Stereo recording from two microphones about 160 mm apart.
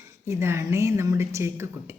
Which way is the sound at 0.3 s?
15° right (ahead or behind).